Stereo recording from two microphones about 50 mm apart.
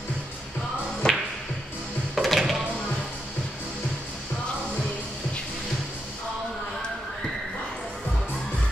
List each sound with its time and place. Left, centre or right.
1.0 s music: centre
2.1 s music: centre